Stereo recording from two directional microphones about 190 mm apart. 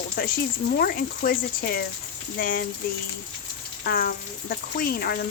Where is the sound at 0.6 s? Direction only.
55° left (ahead or behind).